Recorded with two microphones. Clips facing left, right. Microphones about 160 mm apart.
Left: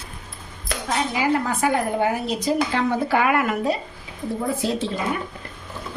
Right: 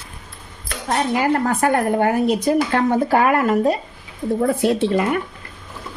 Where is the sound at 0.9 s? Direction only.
50° right (ahead or behind).